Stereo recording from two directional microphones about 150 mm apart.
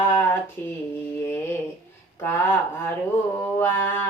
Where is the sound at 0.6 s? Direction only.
15° left (ahead or behind).